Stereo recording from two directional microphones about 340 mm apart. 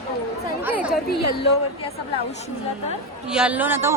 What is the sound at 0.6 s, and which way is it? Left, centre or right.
Speech, centre.